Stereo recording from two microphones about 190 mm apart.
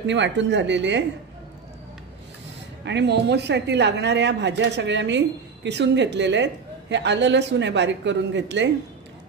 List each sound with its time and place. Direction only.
0.0 s speech: 70° right (ahead or behind)
2.8 s speech: 65° right (ahead or behind)